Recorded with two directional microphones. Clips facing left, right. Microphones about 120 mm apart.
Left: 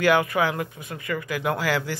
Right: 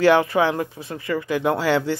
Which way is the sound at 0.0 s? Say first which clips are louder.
Right 4 dB; 30° right (ahead or behind).